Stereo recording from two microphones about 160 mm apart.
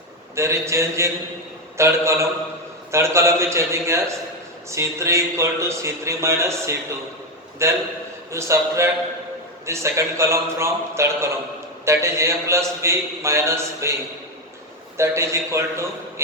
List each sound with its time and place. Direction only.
0.3 s a man's voice: 15° right (ahead or behind)
14.9 s a man's voice: 15° right (ahead or behind)